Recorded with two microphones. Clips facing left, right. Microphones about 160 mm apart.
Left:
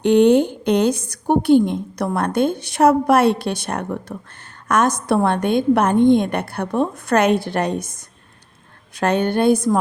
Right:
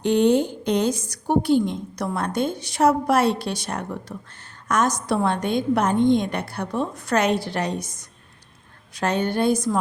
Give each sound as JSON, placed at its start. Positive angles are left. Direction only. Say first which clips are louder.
{"t": 0.0, "sound": "a woman's voice", "louder": "left 5 dB", "side_deg": 60}